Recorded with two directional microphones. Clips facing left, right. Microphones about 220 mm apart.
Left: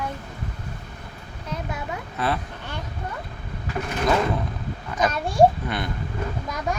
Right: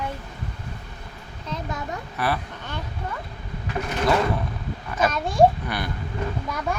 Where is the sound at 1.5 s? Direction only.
10° left (ahead or behind).